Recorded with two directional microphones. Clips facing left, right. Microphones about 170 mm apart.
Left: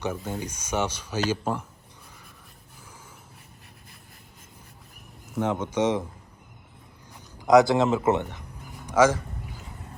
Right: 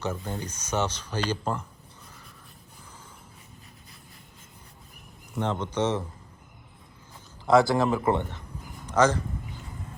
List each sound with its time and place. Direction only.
0.0 s speech: 10° left (ahead or behind)
5.3 s speech: 10° left (ahead or behind)
7.4 s speech: 20° left (ahead or behind)